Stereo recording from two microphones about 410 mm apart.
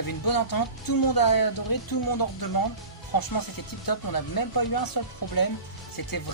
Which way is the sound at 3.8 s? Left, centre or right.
Left.